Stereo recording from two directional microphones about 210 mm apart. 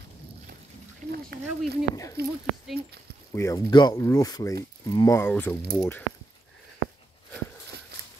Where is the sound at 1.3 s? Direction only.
50° right (ahead or behind).